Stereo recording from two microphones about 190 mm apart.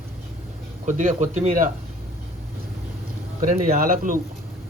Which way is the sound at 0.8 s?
45° right (ahead or behind).